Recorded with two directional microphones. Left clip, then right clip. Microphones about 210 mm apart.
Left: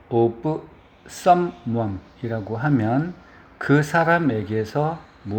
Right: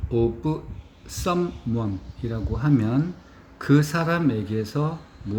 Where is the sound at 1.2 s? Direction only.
10° right (ahead or behind).